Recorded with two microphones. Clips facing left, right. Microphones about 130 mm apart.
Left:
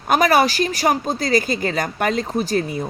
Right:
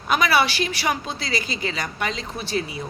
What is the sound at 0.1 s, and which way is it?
Speech, 45° left (ahead or behind).